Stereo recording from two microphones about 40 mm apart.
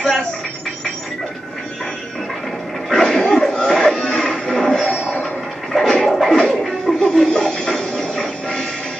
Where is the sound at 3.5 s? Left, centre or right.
Centre.